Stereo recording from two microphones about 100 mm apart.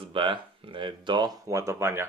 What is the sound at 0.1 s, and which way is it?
Speech, 60° right (ahead or behind).